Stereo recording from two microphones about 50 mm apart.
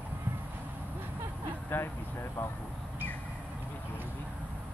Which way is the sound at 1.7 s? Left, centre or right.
Left.